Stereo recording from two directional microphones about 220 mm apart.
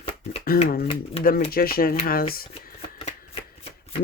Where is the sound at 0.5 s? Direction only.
45° left (ahead or behind).